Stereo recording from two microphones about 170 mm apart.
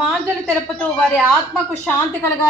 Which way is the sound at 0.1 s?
5° left (ahead or behind).